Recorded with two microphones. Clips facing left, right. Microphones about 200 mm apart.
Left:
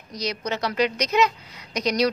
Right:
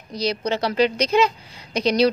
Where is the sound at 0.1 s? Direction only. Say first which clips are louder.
Right 5 dB; 30° right (ahead or behind).